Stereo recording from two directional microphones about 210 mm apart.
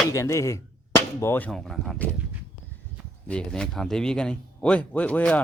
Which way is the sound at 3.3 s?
5° left (ahead or behind).